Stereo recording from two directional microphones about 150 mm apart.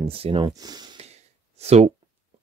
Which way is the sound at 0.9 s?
45° right (ahead or behind).